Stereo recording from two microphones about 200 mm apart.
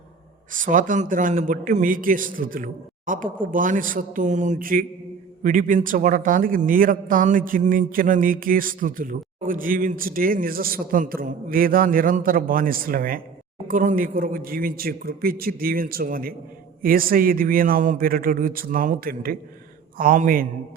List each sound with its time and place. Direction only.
0.5 s a man's voice: 40° right (ahead or behind)